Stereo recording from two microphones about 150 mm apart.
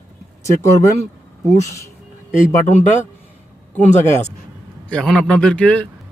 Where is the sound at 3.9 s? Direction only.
50° left (ahead or behind).